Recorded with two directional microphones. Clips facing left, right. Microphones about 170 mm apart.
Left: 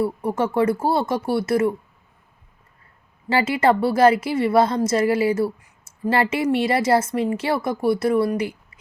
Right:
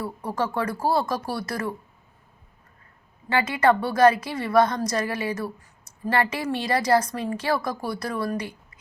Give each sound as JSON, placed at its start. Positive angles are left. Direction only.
{"t": 0.0, "sound": "a woman's voice", "side_deg": 25}
{"t": 3.2, "sound": "a woman's voice", "side_deg": 30}